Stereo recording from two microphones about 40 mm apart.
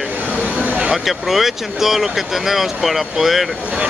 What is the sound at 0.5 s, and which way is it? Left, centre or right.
Speech, right.